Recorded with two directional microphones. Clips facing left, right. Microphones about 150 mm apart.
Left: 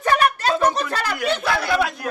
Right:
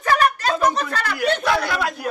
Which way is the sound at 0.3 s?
30° left (ahead or behind).